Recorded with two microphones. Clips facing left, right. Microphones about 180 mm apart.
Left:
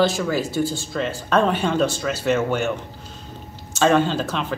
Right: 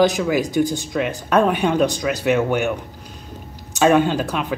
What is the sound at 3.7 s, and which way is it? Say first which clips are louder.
Speech: right 2 dB; 10° right (ahead or behind).